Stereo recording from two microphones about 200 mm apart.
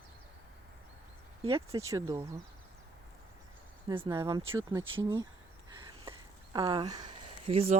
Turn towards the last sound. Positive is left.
turn(degrees=-30)  # may be behind; listen again after turning